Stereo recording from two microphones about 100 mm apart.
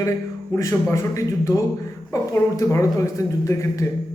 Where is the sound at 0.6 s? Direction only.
30° left (ahead or behind).